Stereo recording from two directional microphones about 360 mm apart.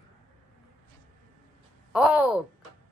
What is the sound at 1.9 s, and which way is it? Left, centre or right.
Speech, centre.